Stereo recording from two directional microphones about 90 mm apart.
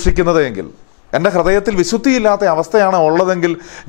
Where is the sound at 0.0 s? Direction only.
15° left (ahead or behind).